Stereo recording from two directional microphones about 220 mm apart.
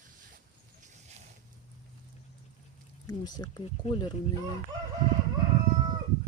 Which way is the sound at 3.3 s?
20° left (ahead or behind).